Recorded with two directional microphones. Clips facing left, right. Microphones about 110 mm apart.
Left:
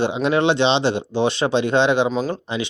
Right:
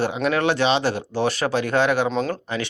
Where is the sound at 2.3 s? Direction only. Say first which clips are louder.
Left 2 dB; 20° left (ahead or behind).